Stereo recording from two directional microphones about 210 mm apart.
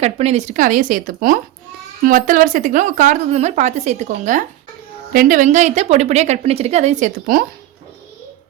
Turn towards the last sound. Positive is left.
turn(degrees=-40)  # may be behind; listen again after turning